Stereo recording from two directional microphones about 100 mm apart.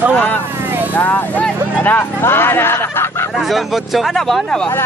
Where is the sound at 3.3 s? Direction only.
Centre (ahead or behind).